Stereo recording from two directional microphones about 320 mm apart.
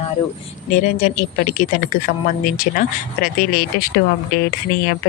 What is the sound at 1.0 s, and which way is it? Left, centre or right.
Speech, left.